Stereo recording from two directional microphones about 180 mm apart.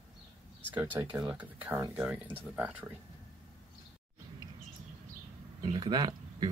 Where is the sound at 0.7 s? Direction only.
10° right (ahead or behind).